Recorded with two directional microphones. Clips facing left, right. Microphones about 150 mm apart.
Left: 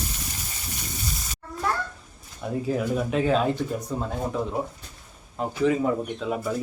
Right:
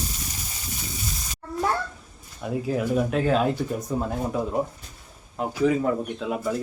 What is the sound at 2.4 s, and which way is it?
Speech, centre (ahead or behind).